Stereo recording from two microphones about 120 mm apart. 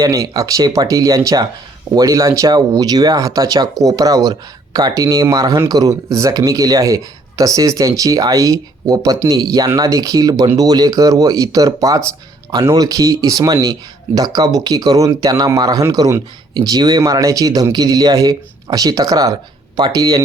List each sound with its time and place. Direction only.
0.0 s speech: 30° right (ahead or behind)